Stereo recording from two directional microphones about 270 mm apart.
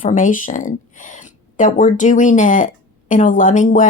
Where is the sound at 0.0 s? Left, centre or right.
Left.